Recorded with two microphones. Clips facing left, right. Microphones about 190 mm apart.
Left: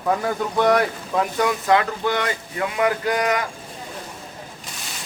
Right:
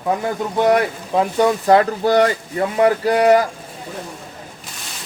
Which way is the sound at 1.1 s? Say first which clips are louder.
Right 6 dB; 30° right (ahead or behind).